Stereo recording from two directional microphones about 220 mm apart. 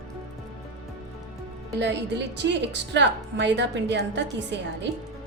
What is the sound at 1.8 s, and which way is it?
A woman's voice, 50° right (ahead or behind).